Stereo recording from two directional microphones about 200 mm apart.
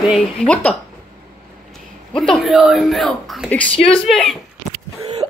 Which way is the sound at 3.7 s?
25° left (ahead or behind).